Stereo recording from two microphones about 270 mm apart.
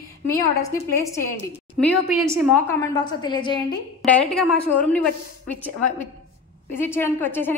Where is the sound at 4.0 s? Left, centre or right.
Centre.